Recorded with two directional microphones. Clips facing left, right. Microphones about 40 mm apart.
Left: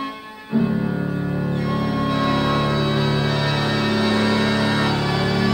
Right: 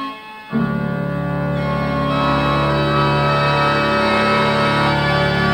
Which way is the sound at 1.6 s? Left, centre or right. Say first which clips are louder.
Right 2 dB; right.